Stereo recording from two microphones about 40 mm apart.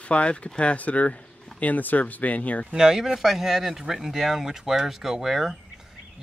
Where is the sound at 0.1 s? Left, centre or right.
Left.